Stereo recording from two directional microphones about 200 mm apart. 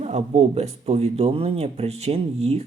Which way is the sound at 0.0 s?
30° right (ahead or behind).